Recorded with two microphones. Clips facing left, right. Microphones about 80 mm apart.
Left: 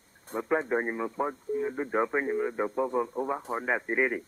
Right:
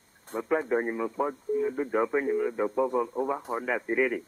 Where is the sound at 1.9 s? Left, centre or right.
Left.